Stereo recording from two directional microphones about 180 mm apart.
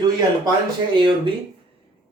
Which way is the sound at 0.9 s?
25° right (ahead or behind).